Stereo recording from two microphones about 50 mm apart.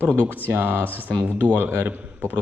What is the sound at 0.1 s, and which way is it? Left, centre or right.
Speech, right.